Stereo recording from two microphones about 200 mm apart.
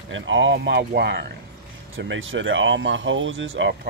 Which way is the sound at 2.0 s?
70° right (ahead or behind).